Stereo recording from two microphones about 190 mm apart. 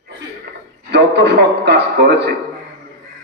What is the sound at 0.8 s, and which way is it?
A man's voice, 65° right (ahead or behind).